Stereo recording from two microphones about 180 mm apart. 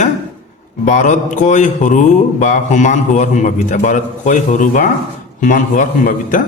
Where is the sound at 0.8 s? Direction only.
45° left (ahead or behind).